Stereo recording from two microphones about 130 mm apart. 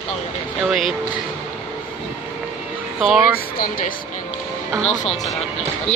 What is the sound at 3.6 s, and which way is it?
Speech, 90° left.